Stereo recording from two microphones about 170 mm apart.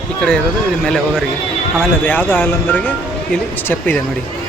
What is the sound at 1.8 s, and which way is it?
Speech, 10° left (ahead or behind).